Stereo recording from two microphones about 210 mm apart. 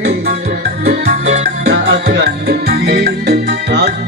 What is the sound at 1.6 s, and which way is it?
Music, 50° right (ahead or behind).